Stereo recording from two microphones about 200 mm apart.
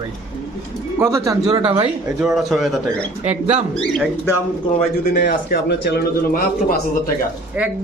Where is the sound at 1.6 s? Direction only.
30° right (ahead or behind).